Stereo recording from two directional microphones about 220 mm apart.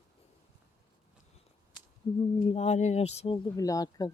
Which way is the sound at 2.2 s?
25° left (ahead or behind).